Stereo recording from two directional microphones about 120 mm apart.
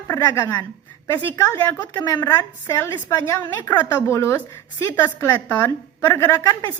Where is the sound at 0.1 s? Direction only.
20° left (ahead or behind).